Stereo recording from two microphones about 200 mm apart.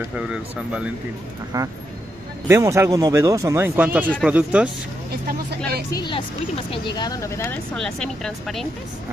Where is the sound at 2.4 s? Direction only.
15° right (ahead or behind).